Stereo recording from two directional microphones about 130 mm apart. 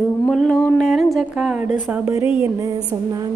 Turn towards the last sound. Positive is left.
turn(degrees=-30)  # may be behind; listen again after turning